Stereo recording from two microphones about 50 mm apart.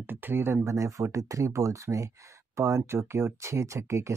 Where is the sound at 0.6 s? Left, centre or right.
Right.